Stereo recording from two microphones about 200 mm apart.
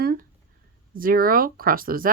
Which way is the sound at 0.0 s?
50° right (ahead or behind).